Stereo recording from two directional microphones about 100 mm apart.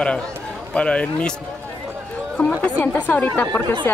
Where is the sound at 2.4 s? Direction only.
10° left (ahead or behind).